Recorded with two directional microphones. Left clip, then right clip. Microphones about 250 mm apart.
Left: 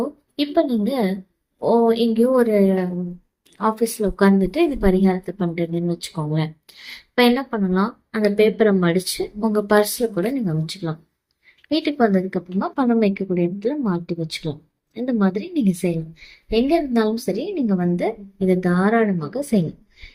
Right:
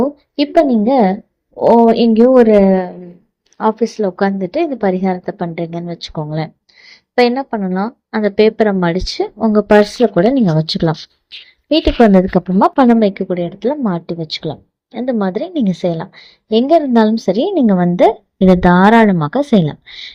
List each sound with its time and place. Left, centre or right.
0.3 s a woman's voice: right